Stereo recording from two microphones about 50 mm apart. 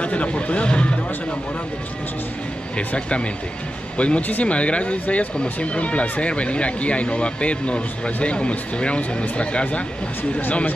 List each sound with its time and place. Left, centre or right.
0.0 s speech: left
2.9 s speech: left